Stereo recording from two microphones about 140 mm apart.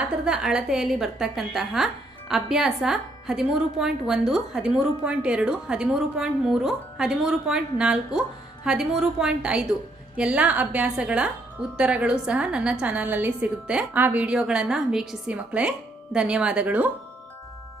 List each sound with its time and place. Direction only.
0.0 s a woman's voice: 5° right (ahead or behind)